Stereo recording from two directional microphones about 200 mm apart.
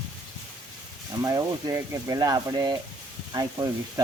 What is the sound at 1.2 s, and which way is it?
Speech, 15° right (ahead or behind).